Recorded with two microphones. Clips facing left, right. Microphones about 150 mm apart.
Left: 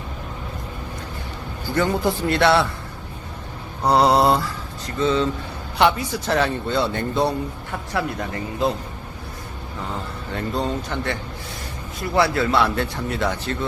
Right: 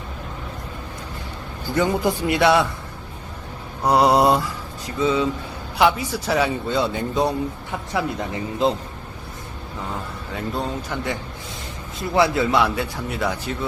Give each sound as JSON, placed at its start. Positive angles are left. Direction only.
{"t": 1.7, "sound": "speech", "side_deg": -15}
{"t": 3.8, "sound": "speech", "side_deg": -10}
{"t": 10.3, "sound": "speech", "side_deg": -5}